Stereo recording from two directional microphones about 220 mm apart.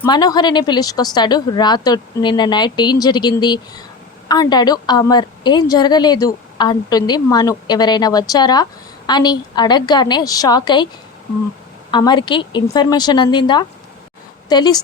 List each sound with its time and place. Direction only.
0.0 s a woman's voice: 15° left (ahead or behind)
11.9 s a woman's voice: 20° left (ahead or behind)